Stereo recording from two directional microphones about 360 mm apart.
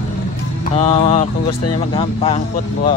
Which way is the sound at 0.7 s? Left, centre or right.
Centre.